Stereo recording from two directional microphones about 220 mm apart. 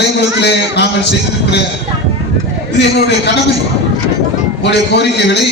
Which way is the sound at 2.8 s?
55° left (ahead or behind).